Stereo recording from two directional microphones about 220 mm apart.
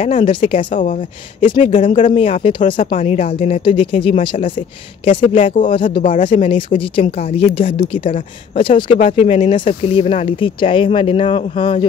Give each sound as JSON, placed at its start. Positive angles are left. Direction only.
{"t": 0.0, "sound": "speech", "side_deg": 25}